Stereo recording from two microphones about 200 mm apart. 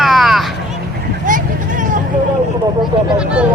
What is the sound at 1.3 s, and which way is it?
Vehicle, 40° right (ahead or behind).